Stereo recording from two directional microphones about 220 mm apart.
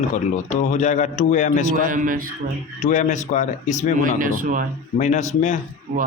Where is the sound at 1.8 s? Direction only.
40° right (ahead or behind).